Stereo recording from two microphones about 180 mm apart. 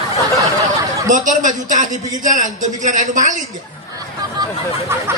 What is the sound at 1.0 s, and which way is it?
A man's voice, 45° right (ahead or behind).